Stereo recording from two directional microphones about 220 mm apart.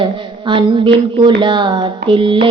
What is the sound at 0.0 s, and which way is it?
Speech, 20° right (ahead or behind).